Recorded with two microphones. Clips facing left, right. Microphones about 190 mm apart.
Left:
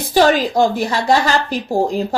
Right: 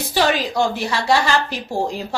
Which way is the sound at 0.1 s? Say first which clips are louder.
Left 6 dB; 45° left (ahead or behind).